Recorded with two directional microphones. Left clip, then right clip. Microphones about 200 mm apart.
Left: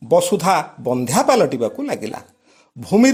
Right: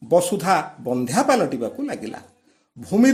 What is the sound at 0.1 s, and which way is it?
A man's voice, 30° left (ahead or behind).